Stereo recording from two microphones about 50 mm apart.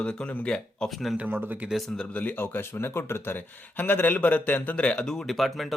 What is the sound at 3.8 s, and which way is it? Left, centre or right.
A man's voice, left.